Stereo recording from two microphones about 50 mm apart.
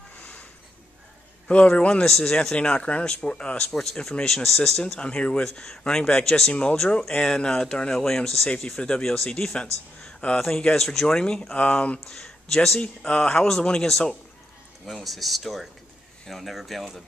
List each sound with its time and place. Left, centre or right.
0.2 s a sound: left
1.8 s speech: centre
2.0 s speech: centre
2.5 s speech: left
4.9 s speech: left
6.5 s speech: left
6.8 s speech: centre
8.6 s speech: centre
11.5 s speech: left
12.0 s speech: centre
12.8 s speech: left; by 17.0 s centre